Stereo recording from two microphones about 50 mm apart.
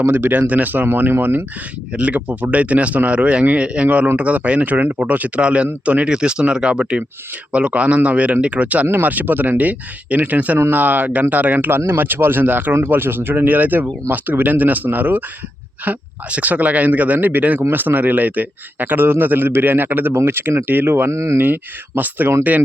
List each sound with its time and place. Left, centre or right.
0.0 s a man's voice: right
0.4 s speech: right
1.9 s a man's voice: right
21.1 s speech: right
21.4 s speech: right